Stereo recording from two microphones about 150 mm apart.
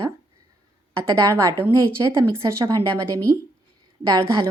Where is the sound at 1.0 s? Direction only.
20° right (ahead or behind).